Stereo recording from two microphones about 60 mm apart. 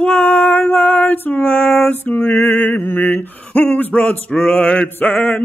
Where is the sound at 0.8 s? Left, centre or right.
Left.